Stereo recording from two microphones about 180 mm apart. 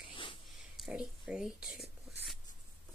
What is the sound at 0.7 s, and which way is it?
Speech, centre (ahead or behind).